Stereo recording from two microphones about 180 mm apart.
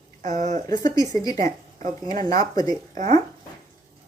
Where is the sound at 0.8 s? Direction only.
20° left (ahead or behind).